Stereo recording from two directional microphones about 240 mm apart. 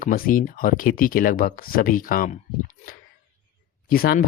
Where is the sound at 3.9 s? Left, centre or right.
Left.